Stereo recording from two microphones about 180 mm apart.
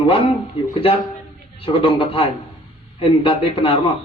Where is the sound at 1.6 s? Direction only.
30° left (ahead or behind).